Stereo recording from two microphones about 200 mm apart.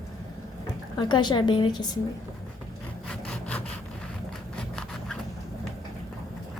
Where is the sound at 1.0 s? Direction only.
20° left (ahead or behind).